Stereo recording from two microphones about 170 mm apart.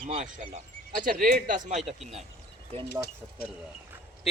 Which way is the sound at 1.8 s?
Centre (ahead or behind).